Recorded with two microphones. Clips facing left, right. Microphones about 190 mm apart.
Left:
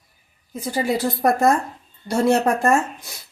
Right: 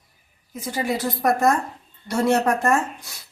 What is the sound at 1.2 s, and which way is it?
A woman's voice, 30° left (ahead or behind).